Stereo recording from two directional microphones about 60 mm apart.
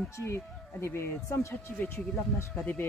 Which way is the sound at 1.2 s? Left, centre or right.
Left.